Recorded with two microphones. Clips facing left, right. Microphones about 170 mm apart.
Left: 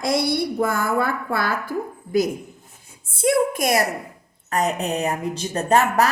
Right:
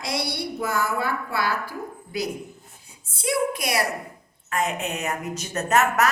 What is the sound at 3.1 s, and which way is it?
A woman's voice, 50° left (ahead or behind).